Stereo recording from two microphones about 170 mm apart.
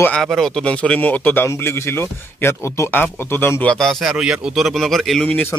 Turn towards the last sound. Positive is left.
turn(degrees=10)  # may be behind; listen again after turning